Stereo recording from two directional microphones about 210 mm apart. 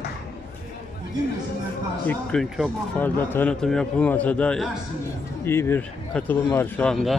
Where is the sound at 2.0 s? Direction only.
5° left (ahead or behind).